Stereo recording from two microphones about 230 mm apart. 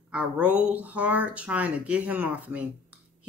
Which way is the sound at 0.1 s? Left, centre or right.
Centre.